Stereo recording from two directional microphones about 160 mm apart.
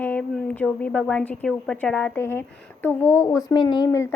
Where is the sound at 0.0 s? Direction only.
5° left (ahead or behind).